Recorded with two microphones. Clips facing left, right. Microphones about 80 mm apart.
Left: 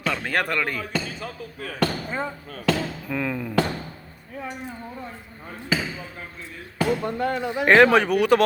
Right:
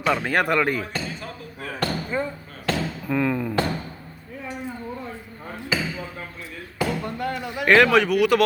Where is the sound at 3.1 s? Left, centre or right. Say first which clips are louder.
Right 5 dB; centre.